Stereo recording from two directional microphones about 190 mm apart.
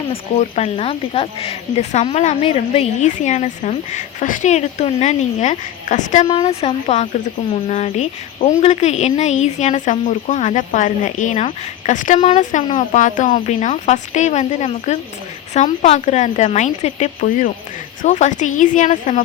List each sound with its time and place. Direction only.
0.1 s speech: 35° left (ahead or behind)